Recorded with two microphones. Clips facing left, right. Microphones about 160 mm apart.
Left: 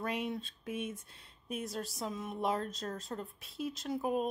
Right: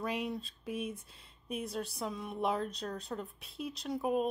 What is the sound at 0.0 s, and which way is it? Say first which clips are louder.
A woman's voice: even; centre (ahead or behind).